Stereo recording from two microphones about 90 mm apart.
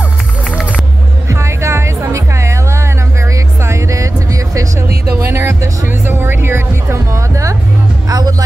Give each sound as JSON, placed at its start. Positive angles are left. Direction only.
{"t": 1.3, "sound": "music", "side_deg": -35}